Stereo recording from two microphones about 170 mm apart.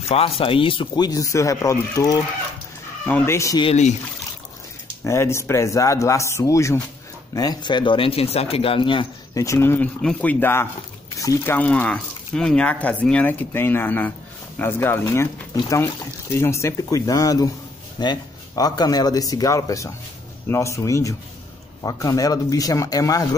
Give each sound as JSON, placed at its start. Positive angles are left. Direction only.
{"t": 0.4, "sound": "speech", "side_deg": 30}
{"t": 3.6, "sound": "speech", "side_deg": 40}
{"t": 5.0, "sound": "speech", "side_deg": 15}